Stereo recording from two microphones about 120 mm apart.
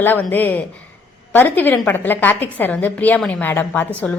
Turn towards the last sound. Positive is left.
turn(degrees=15)  # may be behind; listen again after turning